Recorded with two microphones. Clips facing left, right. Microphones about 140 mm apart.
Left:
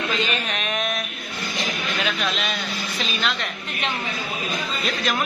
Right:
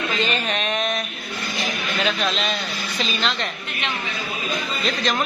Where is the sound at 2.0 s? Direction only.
Centre (ahead or behind).